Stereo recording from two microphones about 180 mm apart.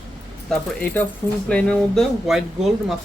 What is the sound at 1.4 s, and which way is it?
Speech, 5° left (ahead or behind).